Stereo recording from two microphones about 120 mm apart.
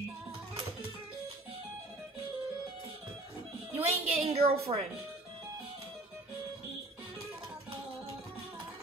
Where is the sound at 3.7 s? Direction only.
55° right (ahead or behind).